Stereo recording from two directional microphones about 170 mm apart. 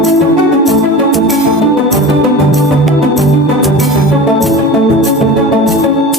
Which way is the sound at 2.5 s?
Centre (ahead or behind).